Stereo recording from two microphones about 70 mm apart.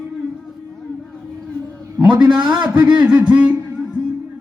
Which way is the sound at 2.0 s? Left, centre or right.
Centre.